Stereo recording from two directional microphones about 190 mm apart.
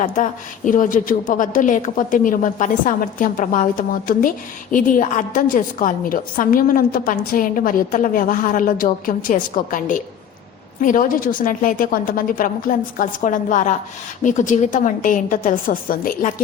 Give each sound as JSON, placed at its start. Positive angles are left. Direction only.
{"t": 0.0, "sound": "a woman's voice", "side_deg": 40}